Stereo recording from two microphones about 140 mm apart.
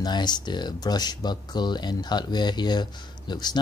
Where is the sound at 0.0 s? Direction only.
30° left (ahead or behind).